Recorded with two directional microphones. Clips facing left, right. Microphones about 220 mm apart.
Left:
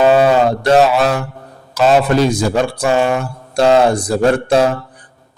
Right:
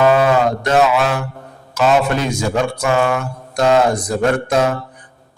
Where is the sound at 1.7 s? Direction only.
35° left (ahead or behind).